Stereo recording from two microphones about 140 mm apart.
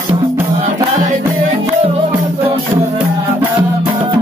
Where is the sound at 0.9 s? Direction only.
60° right (ahead or behind).